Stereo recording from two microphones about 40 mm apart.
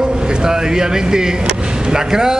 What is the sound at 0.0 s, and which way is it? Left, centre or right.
A man's voice, centre.